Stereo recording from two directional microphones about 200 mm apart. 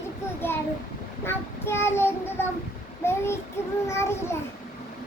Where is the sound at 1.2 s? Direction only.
10° left (ahead or behind).